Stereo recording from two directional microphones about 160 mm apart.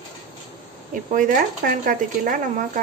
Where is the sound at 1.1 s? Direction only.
60° right (ahead or behind).